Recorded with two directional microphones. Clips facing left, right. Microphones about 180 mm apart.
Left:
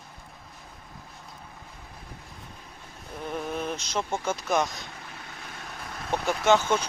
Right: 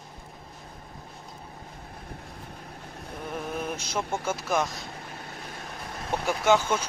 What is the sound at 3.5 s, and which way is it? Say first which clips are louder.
Speech: right 1 dB; 10° right (ahead or behind).